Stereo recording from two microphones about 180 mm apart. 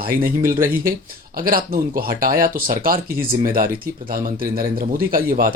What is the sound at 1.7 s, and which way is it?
Speech, 50° right (ahead or behind).